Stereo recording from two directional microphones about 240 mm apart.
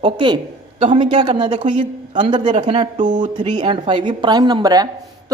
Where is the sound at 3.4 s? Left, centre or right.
Centre.